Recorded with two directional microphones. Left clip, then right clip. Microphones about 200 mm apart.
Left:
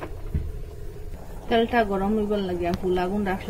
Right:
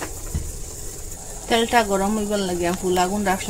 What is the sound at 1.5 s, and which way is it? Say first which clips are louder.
Speech: right 3 dB; 60° right (ahead or behind).